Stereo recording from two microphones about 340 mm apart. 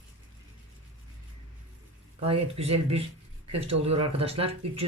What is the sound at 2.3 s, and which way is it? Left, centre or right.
Speech, centre.